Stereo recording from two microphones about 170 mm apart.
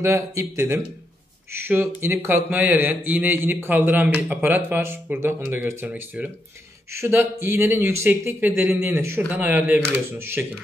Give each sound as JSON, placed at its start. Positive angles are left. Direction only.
{"t": 0.0, "sound": "speech", "side_deg": -15}